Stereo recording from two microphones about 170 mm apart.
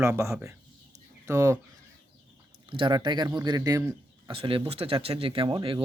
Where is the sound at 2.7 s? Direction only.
30° right (ahead or behind).